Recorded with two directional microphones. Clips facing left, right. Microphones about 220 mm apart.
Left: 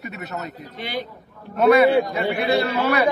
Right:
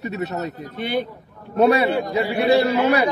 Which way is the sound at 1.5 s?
30° right (ahead or behind).